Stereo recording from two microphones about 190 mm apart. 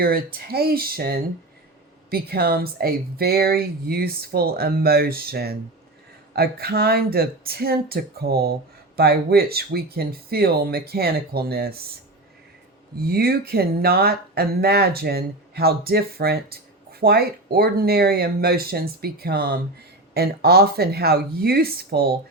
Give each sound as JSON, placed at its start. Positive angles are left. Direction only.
{"t": 0.0, "sound": "speech", "side_deg": -50}
{"t": 13.0, "sound": "speech", "side_deg": -55}